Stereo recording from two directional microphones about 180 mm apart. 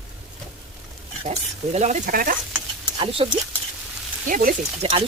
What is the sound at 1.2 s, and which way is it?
Speech, 35° right (ahead or behind).